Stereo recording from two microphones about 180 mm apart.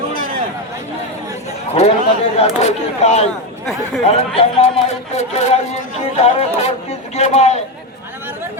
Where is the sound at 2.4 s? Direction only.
35° left (ahead or behind).